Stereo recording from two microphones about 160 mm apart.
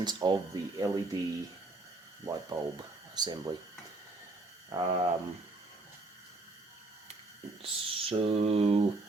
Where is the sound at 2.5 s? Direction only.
20° right (ahead or behind).